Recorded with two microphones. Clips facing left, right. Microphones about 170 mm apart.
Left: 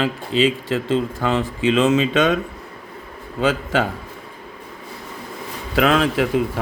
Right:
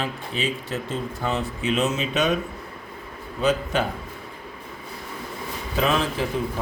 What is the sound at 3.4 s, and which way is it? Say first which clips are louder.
Speech: left 3 dB; 90° left.